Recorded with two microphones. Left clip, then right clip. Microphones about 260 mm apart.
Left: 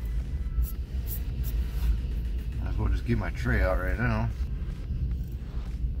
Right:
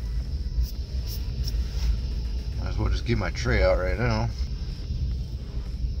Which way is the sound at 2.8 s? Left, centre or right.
Centre.